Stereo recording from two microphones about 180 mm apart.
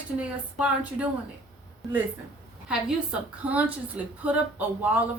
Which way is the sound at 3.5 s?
10° right (ahead or behind).